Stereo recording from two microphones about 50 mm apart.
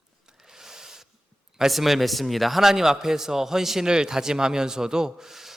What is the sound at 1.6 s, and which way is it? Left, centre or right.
A man's voice, centre.